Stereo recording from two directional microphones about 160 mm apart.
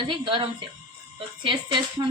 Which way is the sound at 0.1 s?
30° right (ahead or behind).